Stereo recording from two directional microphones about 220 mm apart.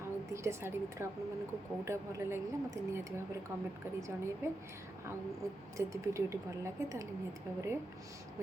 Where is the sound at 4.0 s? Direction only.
15° right (ahead or behind).